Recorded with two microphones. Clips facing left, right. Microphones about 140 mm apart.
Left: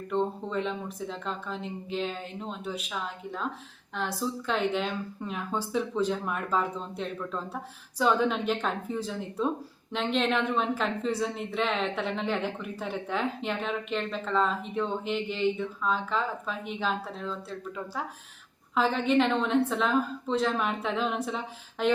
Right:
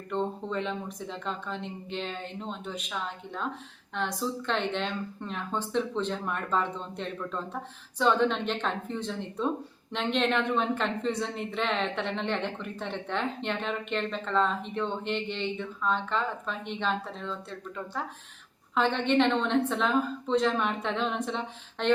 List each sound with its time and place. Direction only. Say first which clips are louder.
0.1 s a woman's voice: left 2 dB; centre (ahead or behind)